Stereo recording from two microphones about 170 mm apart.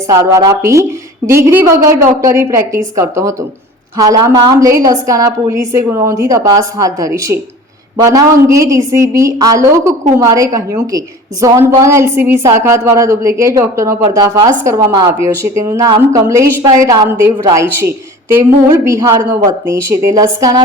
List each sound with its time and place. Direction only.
0.1 s a woman's voice: 20° right (ahead or behind)